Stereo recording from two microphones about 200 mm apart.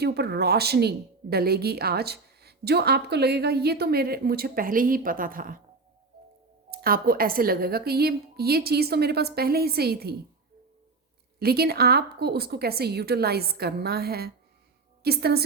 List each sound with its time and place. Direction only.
0.0 s speech: 55° right (ahead or behind)
6.7 s speech: 50° right (ahead or behind)
11.3 s speech: 50° right (ahead or behind)